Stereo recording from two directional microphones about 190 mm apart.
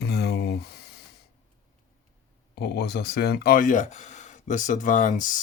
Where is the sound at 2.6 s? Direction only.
60° left (ahead or behind).